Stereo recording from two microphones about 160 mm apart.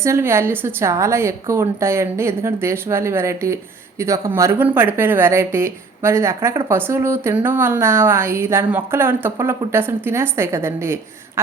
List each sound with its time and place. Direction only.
0.0 s speech: 15° right (ahead or behind)